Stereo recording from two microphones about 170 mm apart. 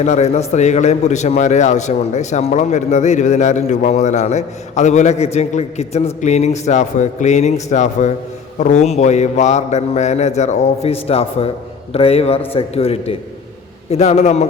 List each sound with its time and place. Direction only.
0.0 s a man's voice: 40° left (ahead or behind)
8.5 s mantra: 45° left (ahead or behind)